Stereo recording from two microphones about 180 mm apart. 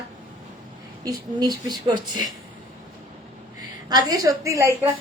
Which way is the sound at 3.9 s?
20° right (ahead or behind).